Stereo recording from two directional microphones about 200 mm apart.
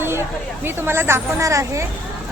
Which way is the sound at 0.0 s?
10° right (ahead or behind).